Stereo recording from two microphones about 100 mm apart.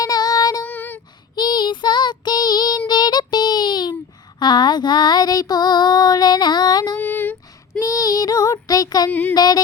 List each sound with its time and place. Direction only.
0.0 s child singing: 40° left (ahead or behind)
0.6 s a sound: 15° left (ahead or behind)
1.4 s child singing: 50° left (ahead or behind)
7.0 s a sound: 20° left (ahead or behind)
7.8 s child singing: 40° left (ahead or behind)
9.0 s child singing: 20° left (ahead or behind)
9.3 s music: 40° left (ahead or behind)